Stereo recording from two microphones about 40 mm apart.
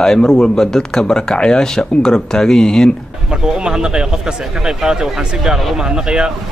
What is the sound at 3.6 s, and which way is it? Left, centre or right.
Speech, centre.